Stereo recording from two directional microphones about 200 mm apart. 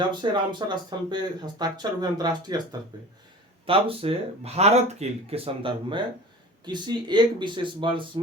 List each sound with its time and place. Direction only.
0.2 s speech: 25° right (ahead or behind)